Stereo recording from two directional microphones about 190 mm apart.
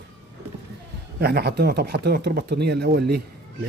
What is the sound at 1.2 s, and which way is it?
Speech, 55° right (ahead or behind).